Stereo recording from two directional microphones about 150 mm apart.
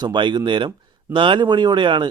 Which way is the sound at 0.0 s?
30° right (ahead or behind).